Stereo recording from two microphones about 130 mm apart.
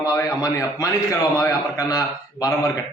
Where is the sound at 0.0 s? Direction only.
25° left (ahead or behind).